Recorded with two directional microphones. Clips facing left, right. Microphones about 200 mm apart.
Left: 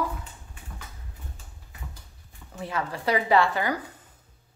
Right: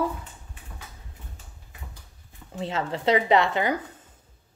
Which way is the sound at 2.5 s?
25° right (ahead or behind).